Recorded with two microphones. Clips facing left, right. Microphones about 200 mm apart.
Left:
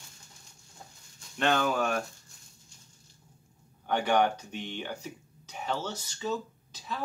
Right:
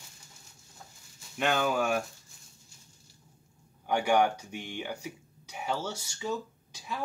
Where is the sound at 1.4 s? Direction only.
10° right (ahead or behind).